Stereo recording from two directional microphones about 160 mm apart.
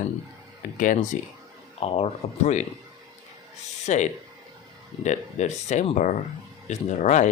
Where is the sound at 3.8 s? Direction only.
45° left (ahead or behind).